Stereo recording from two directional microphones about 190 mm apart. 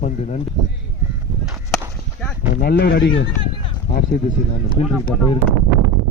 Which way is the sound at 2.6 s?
55° left (ahead or behind).